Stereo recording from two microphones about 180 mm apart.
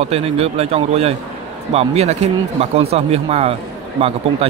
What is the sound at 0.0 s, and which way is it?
Speech, 35° right (ahead or behind).